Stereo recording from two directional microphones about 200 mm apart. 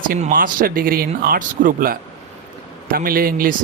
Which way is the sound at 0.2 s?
45° right (ahead or behind).